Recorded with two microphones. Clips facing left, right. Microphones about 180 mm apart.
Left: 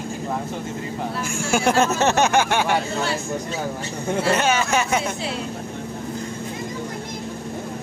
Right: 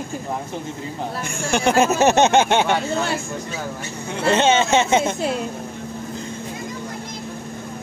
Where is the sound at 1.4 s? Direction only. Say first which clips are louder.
Right 1 dB; 5° left (ahead or behind).